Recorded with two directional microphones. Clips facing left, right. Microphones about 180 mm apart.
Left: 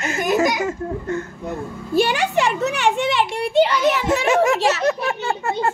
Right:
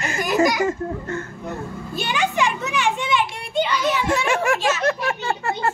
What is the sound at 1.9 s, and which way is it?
A child's voice, 65° left (ahead or behind).